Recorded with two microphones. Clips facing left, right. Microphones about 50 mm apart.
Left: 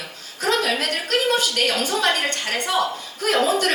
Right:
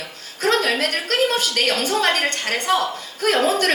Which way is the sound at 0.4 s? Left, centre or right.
Right.